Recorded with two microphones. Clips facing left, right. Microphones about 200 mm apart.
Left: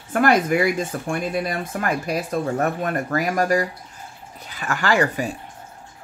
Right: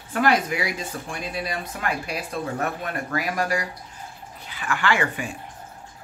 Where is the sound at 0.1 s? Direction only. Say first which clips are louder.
Left 4 dB; 50° left (ahead or behind).